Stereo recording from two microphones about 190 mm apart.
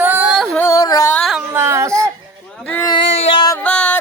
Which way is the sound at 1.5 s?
15° right (ahead or behind).